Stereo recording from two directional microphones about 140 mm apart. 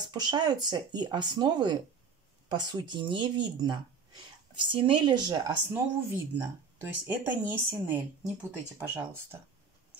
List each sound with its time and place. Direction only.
0.1 s speech: 30° right (ahead or behind)
5.7 s speech: 15° right (ahead or behind)